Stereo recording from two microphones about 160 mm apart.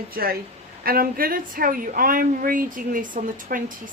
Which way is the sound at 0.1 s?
70° right (ahead or behind).